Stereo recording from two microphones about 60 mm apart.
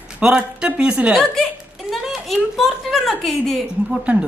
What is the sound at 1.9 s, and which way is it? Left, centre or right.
Speech, centre.